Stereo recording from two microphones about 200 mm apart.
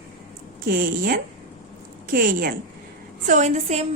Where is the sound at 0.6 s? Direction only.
50° right (ahead or behind).